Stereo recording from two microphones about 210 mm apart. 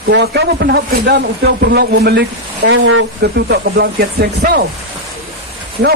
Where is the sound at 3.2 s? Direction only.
50° right (ahead or behind).